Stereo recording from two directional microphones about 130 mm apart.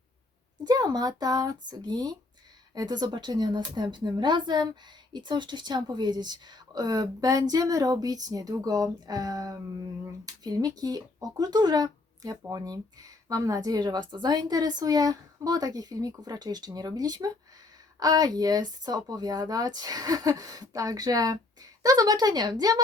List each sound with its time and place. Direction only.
0.6 s speech: 30° right (ahead or behind)